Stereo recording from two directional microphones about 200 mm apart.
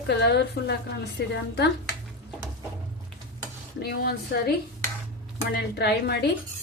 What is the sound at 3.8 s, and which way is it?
Speech, 55° left (ahead or behind).